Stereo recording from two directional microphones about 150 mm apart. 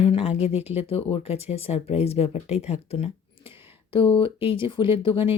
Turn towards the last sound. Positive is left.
turn(degrees=35)  # may be behind; listen again after turning